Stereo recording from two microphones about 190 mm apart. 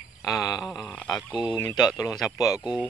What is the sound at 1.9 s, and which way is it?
Speech, 5° right (ahead or behind).